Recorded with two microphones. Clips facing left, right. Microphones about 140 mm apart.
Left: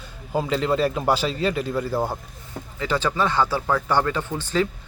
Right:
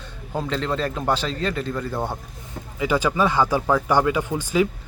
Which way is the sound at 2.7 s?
10° right (ahead or behind).